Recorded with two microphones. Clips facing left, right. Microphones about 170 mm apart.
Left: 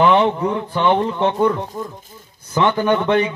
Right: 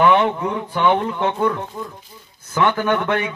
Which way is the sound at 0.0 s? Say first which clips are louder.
Left 1 dB; 15° left (ahead or behind).